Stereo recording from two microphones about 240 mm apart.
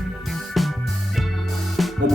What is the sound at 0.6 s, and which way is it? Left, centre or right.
Music, centre.